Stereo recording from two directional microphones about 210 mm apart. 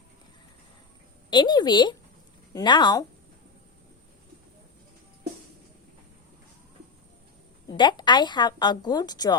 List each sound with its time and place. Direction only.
1.3 s a woman's voice: 20° left (ahead or behind)
7.7 s a woman's voice: 20° left (ahead or behind)